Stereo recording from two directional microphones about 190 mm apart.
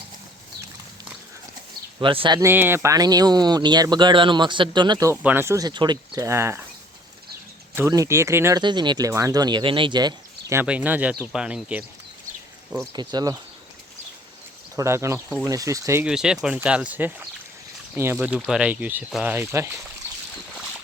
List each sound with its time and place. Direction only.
2.0 s speech: 25° right (ahead or behind)
2.4 s speech: 10° right (ahead or behind)
5.1 s speech: 10° right (ahead or behind)
7.8 s speech: 15° right (ahead or behind)
10.6 s speech: 10° right (ahead or behind)
12.9 s speech: 20° right (ahead or behind)
14.8 s speech: 15° right (ahead or behind)
16.0 s speech: 5° right (ahead or behind)